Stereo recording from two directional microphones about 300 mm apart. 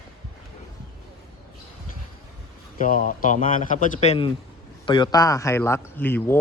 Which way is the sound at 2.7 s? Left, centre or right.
Left.